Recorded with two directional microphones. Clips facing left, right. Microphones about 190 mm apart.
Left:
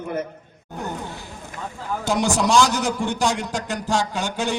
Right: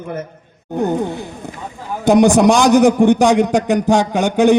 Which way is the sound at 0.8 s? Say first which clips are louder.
Right 13 dB; 60° right (ahead or behind).